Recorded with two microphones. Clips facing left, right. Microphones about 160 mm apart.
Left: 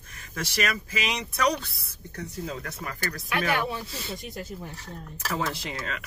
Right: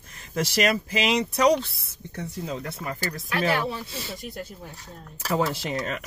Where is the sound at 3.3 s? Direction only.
35° right (ahead or behind).